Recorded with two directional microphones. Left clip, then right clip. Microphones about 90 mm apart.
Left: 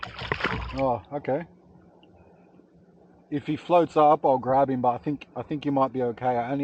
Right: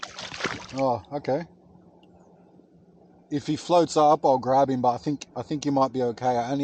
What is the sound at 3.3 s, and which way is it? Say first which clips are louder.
Speech: even; 25° right (ahead or behind).